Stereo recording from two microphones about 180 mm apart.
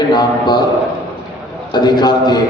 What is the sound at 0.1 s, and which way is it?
Speech, 25° left (ahead or behind).